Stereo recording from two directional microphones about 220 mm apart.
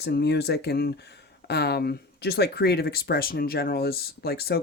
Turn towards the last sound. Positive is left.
turn(degrees=45)  # may be behind; listen again after turning